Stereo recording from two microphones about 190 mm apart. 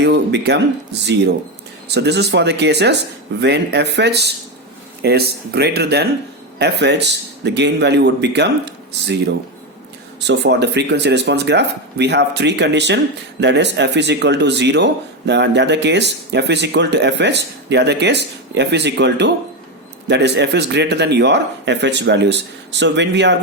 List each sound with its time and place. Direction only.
0.0 s speech: 65° right (ahead or behind)
10.2 s speech: 65° right (ahead or behind)